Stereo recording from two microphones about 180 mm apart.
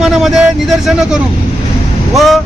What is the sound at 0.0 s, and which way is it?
Speech, centre (ahead or behind).